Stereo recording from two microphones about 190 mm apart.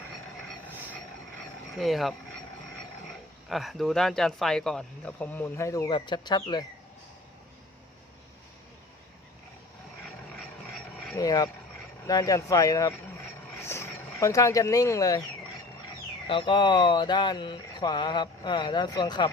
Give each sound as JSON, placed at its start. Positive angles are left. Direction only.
{"t": 1.8, "sound": "speech", "side_deg": 0}
{"t": 3.5, "sound": "speech", "side_deg": 0}
{"t": 10.7, "sound": "a sound", "side_deg": 0}
{"t": 11.2, "sound": "speech", "side_deg": 20}
{"t": 16.2, "sound": "speech", "side_deg": 25}